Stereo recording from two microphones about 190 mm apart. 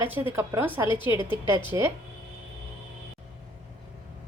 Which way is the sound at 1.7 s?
15° right (ahead or behind).